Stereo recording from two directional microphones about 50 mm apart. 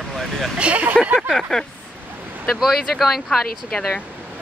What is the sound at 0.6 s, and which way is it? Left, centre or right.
Speech, right.